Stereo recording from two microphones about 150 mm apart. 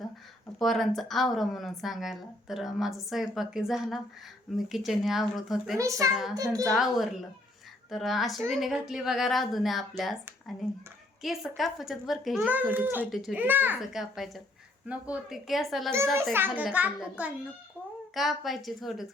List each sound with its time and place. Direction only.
0.6 s speech: centre (ahead or behind)
5.7 s speech: 20° right (ahead or behind)
6.7 s speech: centre (ahead or behind)
11.2 s speech: centre (ahead or behind)
12.5 s a child's voice: 10° right (ahead or behind)
16.3 s a child's voice: 15° right (ahead or behind)